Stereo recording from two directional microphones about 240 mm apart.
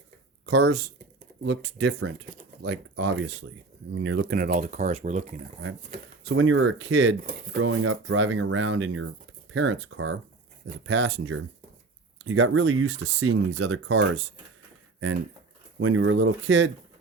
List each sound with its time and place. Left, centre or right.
0.4 s speech: right
6.2 s speech: right
15.8 s speech: right